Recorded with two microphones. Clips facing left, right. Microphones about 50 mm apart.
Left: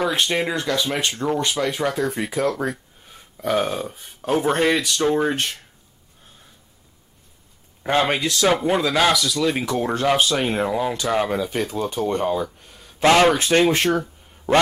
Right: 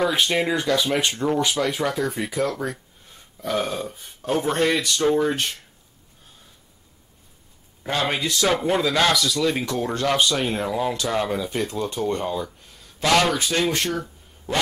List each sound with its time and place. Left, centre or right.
0.0 s speech: centre
3.3 s speech: left
3.7 s speech: centre
7.8 s a man's voice: left
8.2 s speech: centre
12.3 s speech: centre
13.1 s speech: left